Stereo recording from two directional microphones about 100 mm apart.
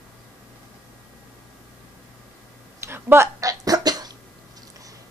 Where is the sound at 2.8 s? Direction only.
25° right (ahead or behind); by 4.1 s 40° right (ahead or behind).